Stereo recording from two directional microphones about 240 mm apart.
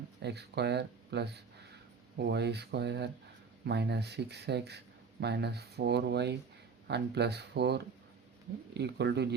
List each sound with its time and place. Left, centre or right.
0.2 s speech: right